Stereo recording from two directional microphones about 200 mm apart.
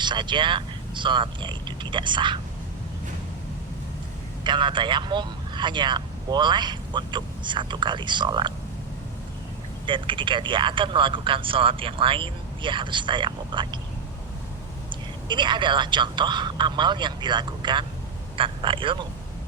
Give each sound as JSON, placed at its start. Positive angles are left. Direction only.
{"t": 0.0, "sound": "speech", "side_deg": -25}
{"t": 4.4, "sound": "speech", "side_deg": -25}
{"t": 9.8, "sound": "speech", "side_deg": -25}
{"t": 14.8, "sound": "speech", "side_deg": -25}